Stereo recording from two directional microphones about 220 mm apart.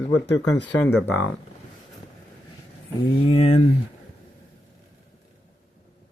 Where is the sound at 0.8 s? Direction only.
10° left (ahead or behind).